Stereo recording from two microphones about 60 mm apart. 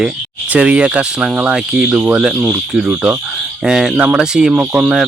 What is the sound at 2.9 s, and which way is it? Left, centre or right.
Speech, centre.